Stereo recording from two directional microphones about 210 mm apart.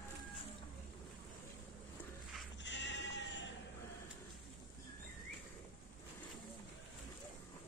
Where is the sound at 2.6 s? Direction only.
60° left (ahead or behind).